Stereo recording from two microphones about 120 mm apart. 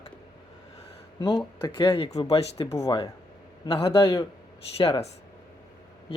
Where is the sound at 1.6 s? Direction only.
40° left (ahead or behind).